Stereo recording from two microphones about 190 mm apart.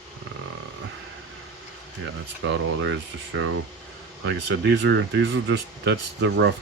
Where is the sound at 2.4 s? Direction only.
80° right.